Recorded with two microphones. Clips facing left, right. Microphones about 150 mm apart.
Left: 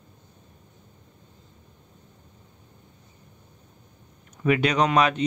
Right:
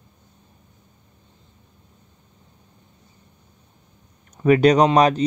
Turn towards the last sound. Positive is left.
turn(degrees=-35)  # may be behind; listen again after turning